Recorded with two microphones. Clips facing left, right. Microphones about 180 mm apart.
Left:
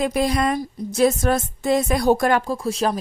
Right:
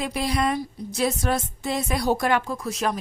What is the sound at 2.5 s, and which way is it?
Speech, 30° left (ahead or behind).